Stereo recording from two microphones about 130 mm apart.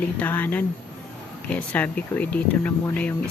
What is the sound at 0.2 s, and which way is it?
Speech, 15° left (ahead or behind).